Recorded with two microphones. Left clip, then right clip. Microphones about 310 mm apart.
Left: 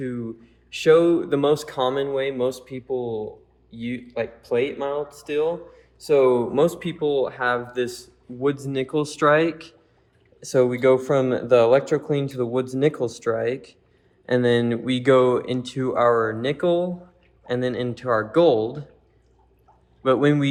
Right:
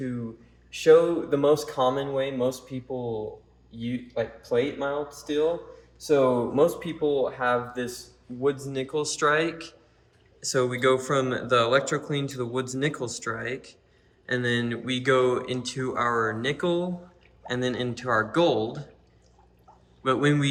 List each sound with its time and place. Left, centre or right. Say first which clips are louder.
0.7 s speech: left 2 dB; left
3.8 s speech: left 2 dB; left; by 18.9 s centre
20.0 s speech: left 5 dB; centre